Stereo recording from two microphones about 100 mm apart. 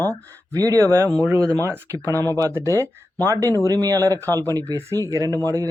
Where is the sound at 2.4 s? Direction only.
30° right (ahead or behind).